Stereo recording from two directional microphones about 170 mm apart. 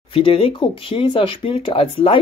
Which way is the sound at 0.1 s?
30° left (ahead or behind).